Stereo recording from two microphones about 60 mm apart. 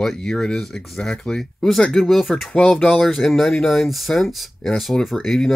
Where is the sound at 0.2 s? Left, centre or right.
Centre.